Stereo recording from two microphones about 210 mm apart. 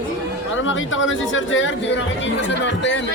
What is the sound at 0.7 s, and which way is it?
A man's voice, 65° left (ahead or behind).